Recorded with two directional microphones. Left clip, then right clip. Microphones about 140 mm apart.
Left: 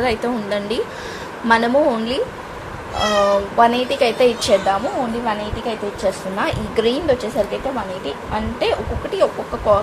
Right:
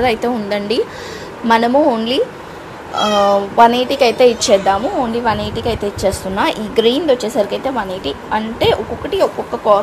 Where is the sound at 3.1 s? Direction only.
45° right (ahead or behind).